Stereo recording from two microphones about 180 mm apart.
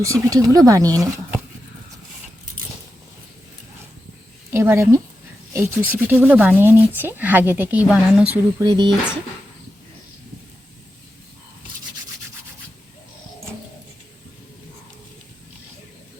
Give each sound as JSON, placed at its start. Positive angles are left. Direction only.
{"t": 0.0, "sound": "speech", "side_deg": -15}
{"t": 4.5, "sound": "speech", "side_deg": -15}
{"t": 8.6, "sound": "speech", "side_deg": -25}